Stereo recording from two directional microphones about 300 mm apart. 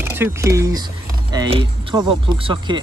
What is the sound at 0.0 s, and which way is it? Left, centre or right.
Speech, centre.